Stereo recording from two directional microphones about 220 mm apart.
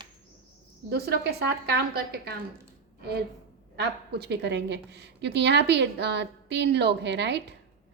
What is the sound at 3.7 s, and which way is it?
A woman's voice, 50° right (ahead or behind).